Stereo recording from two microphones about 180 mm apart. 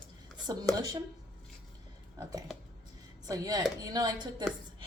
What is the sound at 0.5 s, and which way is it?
Speech, 20° right (ahead or behind).